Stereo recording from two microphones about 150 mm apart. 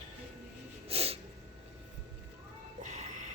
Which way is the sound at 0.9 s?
40° right (ahead or behind).